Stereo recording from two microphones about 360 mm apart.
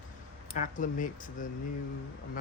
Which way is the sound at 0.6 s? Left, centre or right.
Left.